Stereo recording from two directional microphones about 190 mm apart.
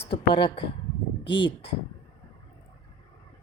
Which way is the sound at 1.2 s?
70° left (ahead or behind).